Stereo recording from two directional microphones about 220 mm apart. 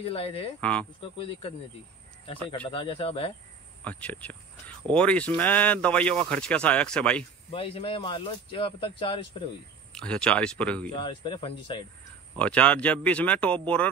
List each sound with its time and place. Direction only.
0.0 s speech: 25° left (ahead or behind)
0.6 s speech: 5° left (ahead or behind)
1.1 s speech: 25° left (ahead or behind)
2.7 s speech: 25° left (ahead or behind)
3.8 s speech: 5° left (ahead or behind)
7.5 s speech: 25° left (ahead or behind)
9.9 s speech: 5° left (ahead or behind)
10.9 s speech: 20° left (ahead or behind)
12.4 s speech: 5° left (ahead or behind)